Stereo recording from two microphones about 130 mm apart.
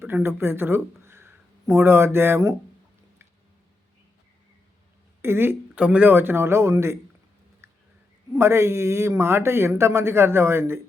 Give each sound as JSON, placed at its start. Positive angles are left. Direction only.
{"t": 0.0, "sound": "speech", "side_deg": -20}
{"t": 5.2, "sound": "speech", "side_deg": -20}
{"t": 7.6, "sound": "a sound", "side_deg": -20}
{"t": 8.4, "sound": "speech", "side_deg": -20}